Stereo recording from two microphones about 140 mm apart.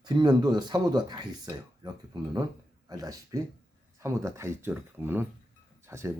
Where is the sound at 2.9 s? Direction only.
25° right (ahead or behind).